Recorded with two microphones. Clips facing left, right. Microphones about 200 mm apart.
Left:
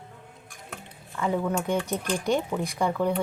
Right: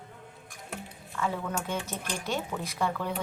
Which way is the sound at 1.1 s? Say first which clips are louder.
Left 6 dB; 15° left (ahead or behind).